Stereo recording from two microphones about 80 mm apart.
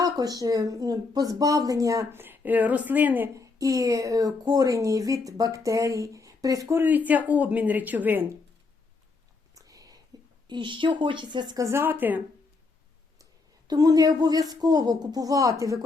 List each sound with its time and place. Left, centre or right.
0.0 s speech: right
2.1 s a woman's voice: right
3.3 s speech: right
6.7 s a woman's voice: right
9.6 s whispering: right
10.1 s a sound: right
10.5 s speech: right
11.5 s a woman's voice: right
13.7 s speech: right